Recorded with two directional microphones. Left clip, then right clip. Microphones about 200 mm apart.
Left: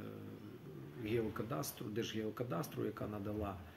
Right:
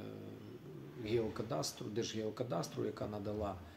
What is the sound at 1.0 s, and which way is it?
Speech, centre (ahead or behind).